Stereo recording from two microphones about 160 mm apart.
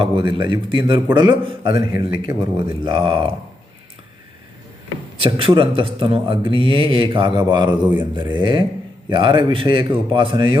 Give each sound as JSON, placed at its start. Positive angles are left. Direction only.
{"t": 0.0, "sound": "a man's voice", "side_deg": -30}
{"t": 5.2, "sound": "a man's voice", "side_deg": -35}